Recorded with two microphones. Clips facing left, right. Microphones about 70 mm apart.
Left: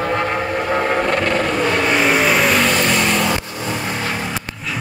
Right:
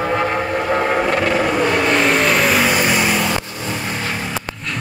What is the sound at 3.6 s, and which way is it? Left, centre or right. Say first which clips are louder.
Vehicle: left 1 dB; left.